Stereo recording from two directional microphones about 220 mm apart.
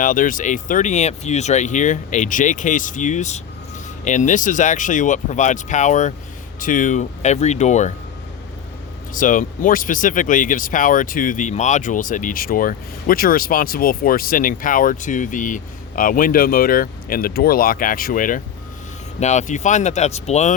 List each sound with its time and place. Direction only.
0.0 s speech: 35° left (ahead or behind)
9.1 s speech: 35° left (ahead or behind)